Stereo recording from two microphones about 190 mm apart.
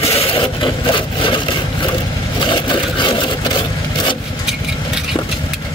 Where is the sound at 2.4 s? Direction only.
25° left (ahead or behind).